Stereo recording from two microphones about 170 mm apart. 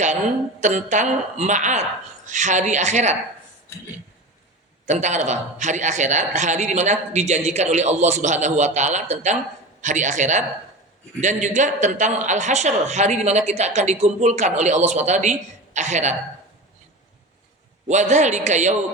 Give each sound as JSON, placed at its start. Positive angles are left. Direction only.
{"t": 0.6, "sound": "a man's voice", "side_deg": -45}
{"t": 4.9, "sound": "a man's voice", "side_deg": -45}
{"t": 17.8, "sound": "a man's voice", "side_deg": -45}